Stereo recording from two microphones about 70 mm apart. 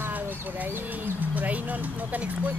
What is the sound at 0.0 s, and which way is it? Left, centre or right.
Speech, right.